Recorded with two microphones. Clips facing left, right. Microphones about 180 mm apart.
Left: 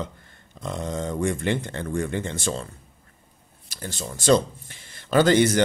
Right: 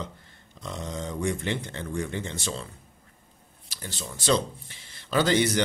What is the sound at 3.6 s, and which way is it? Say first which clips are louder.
Speech: left 5 dB; 45° left (ahead or behind).